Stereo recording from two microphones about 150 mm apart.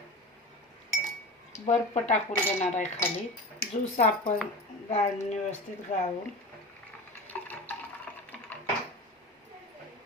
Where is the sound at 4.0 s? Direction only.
55° left (ahead or behind).